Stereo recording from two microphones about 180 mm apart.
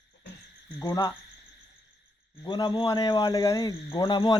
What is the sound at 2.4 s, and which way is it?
Speech, 25° left (ahead or behind).